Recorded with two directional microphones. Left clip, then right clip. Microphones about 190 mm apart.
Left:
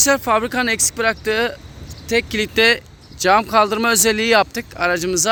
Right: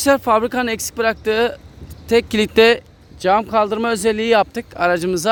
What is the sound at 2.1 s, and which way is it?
Speech, 40° right (ahead or behind).